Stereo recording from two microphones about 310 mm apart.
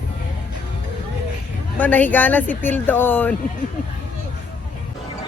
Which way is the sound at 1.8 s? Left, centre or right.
Centre.